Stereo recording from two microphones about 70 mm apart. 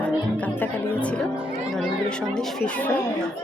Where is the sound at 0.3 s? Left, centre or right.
Left.